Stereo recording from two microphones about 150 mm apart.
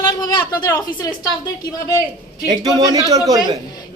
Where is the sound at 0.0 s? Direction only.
25° left (ahead or behind).